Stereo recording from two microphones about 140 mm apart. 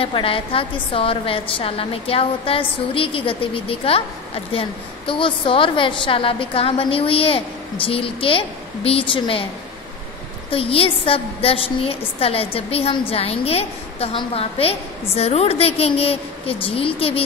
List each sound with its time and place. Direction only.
0.0 s a woman's voice: 40° left (ahead or behind)
10.5 s a woman's voice: 40° left (ahead or behind)